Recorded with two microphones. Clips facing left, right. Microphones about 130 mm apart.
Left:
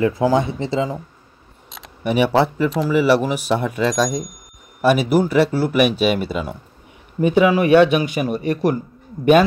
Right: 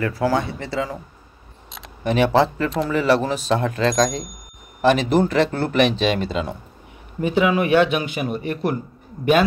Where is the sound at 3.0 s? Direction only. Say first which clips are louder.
Left 2 dB; 10° left (ahead or behind).